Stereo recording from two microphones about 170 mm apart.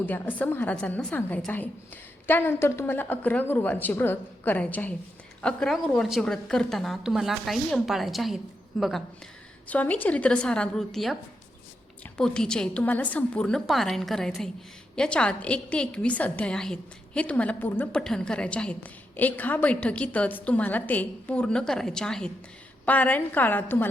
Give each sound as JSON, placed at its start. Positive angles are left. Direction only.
{"t": 0.0, "sound": "a woman's voice", "side_deg": 10}